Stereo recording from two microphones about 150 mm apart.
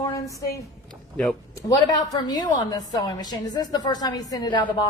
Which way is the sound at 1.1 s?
10° left (ahead or behind).